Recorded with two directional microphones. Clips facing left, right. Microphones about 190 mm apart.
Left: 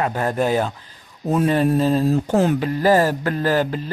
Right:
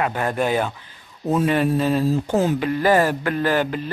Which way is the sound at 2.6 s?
35° left (ahead or behind).